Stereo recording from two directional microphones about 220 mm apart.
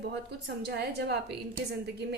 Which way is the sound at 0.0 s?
50° right (ahead or behind).